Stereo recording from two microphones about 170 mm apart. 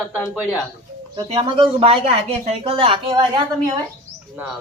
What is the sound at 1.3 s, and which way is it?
Speech, 30° right (ahead or behind).